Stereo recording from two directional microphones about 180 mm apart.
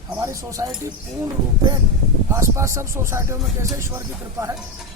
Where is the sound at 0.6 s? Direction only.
20° right (ahead or behind).